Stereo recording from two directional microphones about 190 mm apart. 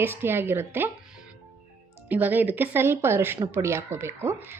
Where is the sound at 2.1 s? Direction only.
10° right (ahead or behind).